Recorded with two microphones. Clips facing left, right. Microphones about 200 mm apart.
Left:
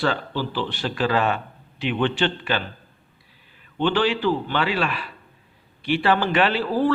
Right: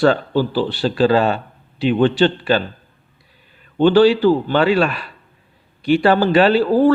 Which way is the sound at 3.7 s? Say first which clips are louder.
Right 10 dB; 40° right (ahead or behind).